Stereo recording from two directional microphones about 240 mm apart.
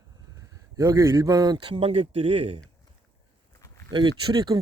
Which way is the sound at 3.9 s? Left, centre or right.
Centre.